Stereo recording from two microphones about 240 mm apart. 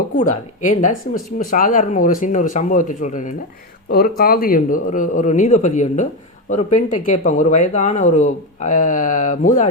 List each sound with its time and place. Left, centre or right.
0.2 s speech: left